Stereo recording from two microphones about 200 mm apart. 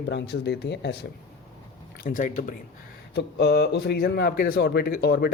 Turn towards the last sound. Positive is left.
turn(degrees=50)  # may be behind; listen again after turning